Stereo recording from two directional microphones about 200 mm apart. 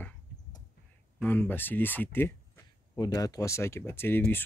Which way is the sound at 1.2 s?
10° left (ahead or behind).